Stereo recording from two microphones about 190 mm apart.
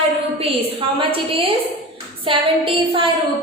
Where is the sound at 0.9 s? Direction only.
30° right (ahead or behind).